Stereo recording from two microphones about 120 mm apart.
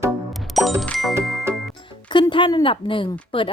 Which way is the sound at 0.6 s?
Centre (ahead or behind).